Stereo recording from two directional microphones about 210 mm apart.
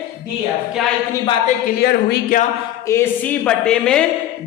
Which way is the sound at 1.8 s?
50° left (ahead or behind).